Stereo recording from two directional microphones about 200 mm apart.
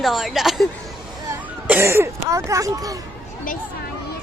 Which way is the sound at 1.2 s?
15° right (ahead or behind).